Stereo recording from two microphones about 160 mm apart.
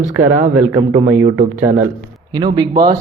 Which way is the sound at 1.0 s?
20° right (ahead or behind).